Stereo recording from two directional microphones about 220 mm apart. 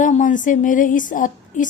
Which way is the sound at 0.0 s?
35° left (ahead or behind).